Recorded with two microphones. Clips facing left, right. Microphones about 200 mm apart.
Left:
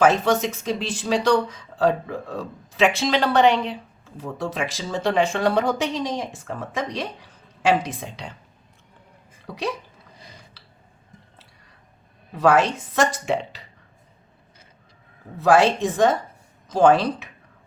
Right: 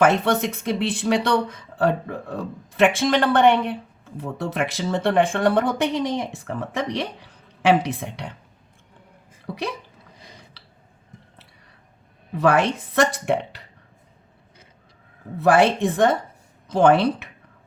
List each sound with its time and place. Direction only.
0.0 s speech: 60° right (ahead or behind)
12.3 s speech: 60° right (ahead or behind)
15.4 s speech: 60° right (ahead or behind)